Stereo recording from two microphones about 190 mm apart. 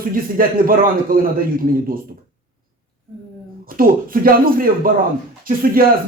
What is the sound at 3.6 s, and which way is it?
Speech, 50° right (ahead or behind).